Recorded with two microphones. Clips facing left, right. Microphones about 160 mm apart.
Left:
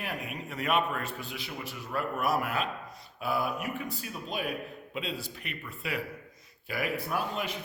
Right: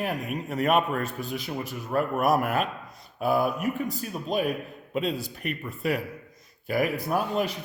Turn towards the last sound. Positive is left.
turn(degrees=-40)  # may be behind; listen again after turning